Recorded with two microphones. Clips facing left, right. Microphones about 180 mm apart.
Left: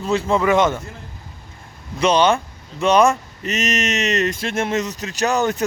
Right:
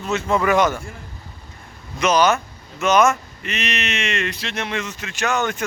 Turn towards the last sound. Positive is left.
turn(degrees=35)  # may be behind; listen again after turning